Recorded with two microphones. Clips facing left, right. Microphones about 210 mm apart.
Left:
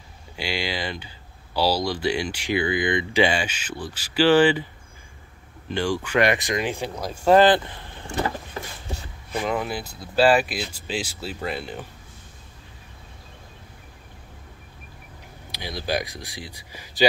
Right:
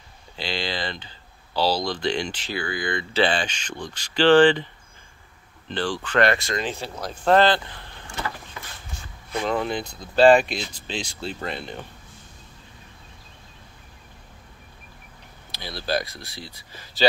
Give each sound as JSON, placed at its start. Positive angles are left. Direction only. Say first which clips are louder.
{"t": 0.4, "sound": "speech", "louder": "left 1 dB", "side_deg": 10}
{"t": 5.7, "sound": "speech", "louder": "left 2 dB", "side_deg": 10}
{"t": 8.6, "sound": "a sound", "louder": "left 7 dB", "side_deg": 35}
{"t": 9.3, "sound": "speech", "louder": "right 1 dB", "side_deg": 5}
{"t": 15.5, "sound": "speech", "louder": "even", "side_deg": 15}